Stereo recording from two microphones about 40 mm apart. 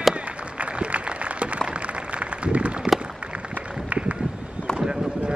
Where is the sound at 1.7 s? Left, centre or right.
Right.